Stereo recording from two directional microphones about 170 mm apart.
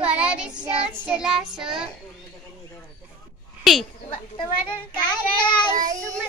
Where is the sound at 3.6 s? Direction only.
Centre (ahead or behind).